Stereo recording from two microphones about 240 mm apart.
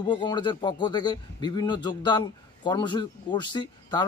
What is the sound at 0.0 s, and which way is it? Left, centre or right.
Speech, centre.